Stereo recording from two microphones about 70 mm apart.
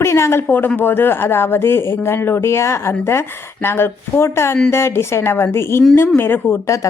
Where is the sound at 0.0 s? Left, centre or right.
Left.